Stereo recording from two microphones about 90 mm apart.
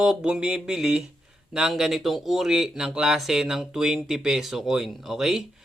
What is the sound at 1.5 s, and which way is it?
Speech, 5° right (ahead or behind).